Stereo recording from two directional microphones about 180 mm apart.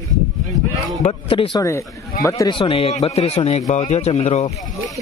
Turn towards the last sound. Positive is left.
turn(degrees=35)  # may be behind; listen again after turning